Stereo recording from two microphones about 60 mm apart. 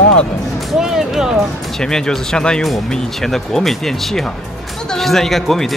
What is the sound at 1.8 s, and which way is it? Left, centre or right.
Speech, centre.